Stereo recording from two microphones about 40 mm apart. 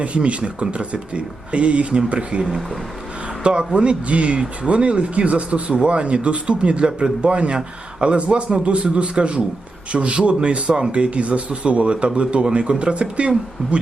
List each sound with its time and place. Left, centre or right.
0.0 s speech: right